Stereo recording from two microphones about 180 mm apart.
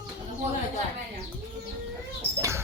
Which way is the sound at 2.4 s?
15° right (ahead or behind).